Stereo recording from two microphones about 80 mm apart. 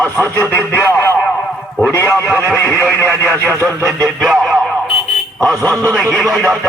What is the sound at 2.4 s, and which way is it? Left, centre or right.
Music, centre.